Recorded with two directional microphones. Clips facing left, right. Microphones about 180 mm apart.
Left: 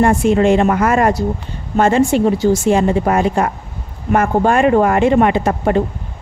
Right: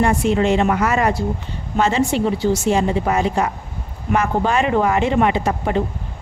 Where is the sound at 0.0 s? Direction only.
50° left (ahead or behind).